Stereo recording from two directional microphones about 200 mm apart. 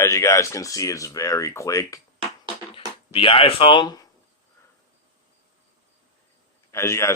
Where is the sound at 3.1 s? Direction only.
25° left (ahead or behind).